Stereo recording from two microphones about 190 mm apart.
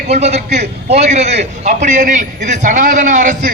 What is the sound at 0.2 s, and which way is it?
A man's voice, 35° right (ahead or behind).